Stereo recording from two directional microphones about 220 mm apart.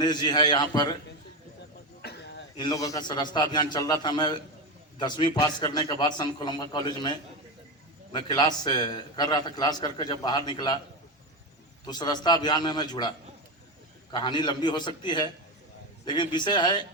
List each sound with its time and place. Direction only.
0.0 s a man's voice: 20° left (ahead or behind)
2.0 s a sound: 50° left (ahead or behind)
2.6 s a man's voice: 15° left (ahead or behind)
11.9 s a man's voice: 20° left (ahead or behind)